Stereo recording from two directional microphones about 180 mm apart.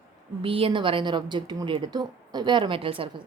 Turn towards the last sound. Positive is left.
turn(degrees=-30)  # may be behind; listen again after turning